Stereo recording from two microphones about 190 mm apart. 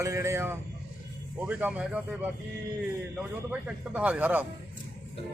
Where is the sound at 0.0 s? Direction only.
15° right (ahead or behind).